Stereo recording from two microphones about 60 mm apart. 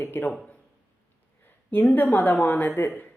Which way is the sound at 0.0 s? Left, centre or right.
Left.